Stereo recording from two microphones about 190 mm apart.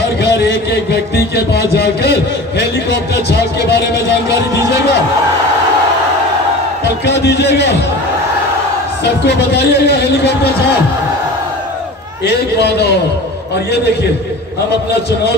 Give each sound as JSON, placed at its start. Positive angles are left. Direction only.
{"t": 0.2, "sound": "a sound", "side_deg": 60}
{"t": 1.1, "sound": "speech", "side_deg": 60}
{"t": 7.1, "sound": "speech", "side_deg": 65}
{"t": 9.2, "sound": "speech", "side_deg": 60}
{"t": 12.3, "sound": "speech", "side_deg": 60}